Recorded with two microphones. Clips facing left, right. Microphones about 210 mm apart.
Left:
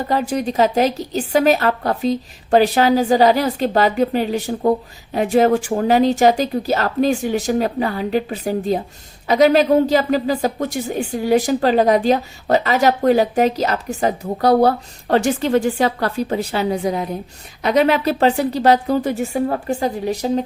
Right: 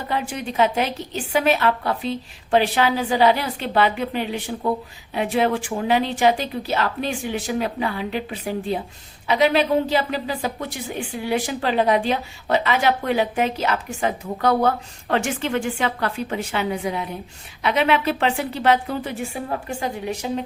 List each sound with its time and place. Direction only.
0.1 s speech: 40° left (ahead or behind)